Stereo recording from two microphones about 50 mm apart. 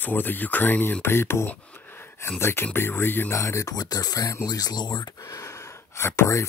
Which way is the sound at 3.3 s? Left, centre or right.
Left.